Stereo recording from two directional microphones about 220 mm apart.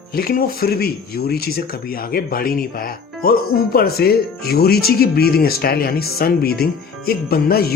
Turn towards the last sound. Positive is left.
turn(degrees=45)  # may be behind; listen again after turning